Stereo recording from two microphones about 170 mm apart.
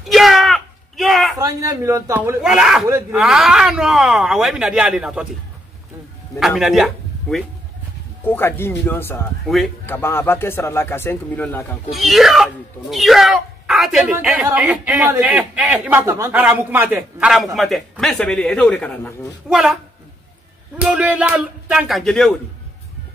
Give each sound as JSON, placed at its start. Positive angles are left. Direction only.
{"t": 0.0, "sound": "a sound", "side_deg": 0}
{"t": 1.4, "sound": "a man's voice", "side_deg": -20}
{"t": 2.4, "sound": "a man's voice", "side_deg": -5}
{"t": 6.4, "sound": "speech", "side_deg": 0}
{"t": 8.3, "sound": "speech", "side_deg": 15}
{"t": 11.9, "sound": "a man's voice", "side_deg": 0}